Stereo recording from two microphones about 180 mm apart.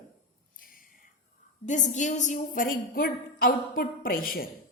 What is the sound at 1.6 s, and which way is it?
A woman's voice, 45° left (ahead or behind).